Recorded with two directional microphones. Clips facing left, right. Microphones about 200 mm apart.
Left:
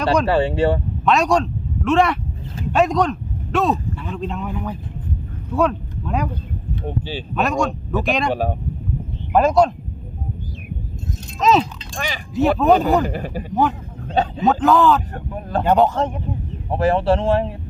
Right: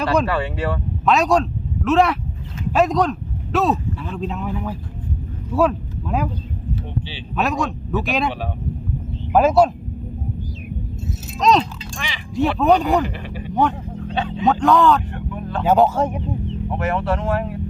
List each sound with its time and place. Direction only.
0.3 s speech: 30° left (ahead or behind)
1.0 s a man's voice: centre (ahead or behind)
7.3 s a man's voice: centre (ahead or behind)
8.3 s speech: 45° left (ahead or behind)
9.3 s speech: 5° right (ahead or behind)
11.3 s a man's voice: 5° left (ahead or behind)
11.9 s speech: 45° left (ahead or behind)
12.3 s a man's voice: centre (ahead or behind)
13.1 s speech: 40° left (ahead or behind)
14.4 s a man's voice: centre (ahead or behind)
15.1 s speech: 40° left (ahead or behind)
15.6 s speech: 5° right (ahead or behind)
16.6 s speech: 30° left (ahead or behind)